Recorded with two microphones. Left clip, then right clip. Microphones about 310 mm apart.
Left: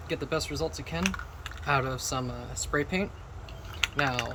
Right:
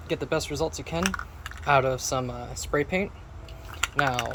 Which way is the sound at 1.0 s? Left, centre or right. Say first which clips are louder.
Right 3 dB; right.